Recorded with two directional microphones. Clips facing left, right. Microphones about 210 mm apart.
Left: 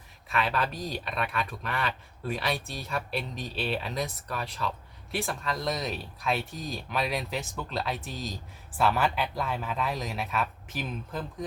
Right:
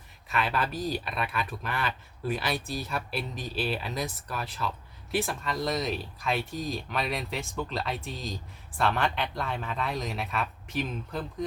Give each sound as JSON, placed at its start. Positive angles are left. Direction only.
{"t": 0.3, "sound": "speech", "side_deg": 0}